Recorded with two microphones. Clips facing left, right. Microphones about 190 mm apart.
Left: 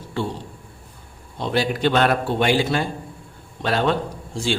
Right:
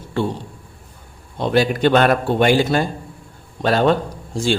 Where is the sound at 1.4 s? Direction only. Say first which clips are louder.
Right 5 dB; 50° right (ahead or behind).